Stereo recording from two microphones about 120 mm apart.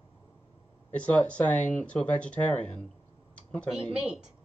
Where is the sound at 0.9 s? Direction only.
10° left (ahead or behind).